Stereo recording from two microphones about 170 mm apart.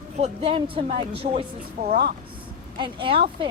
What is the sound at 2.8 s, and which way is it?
Speech, 30° right (ahead or behind).